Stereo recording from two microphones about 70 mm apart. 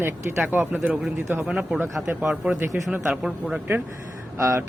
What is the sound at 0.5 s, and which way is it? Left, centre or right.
Speech, right.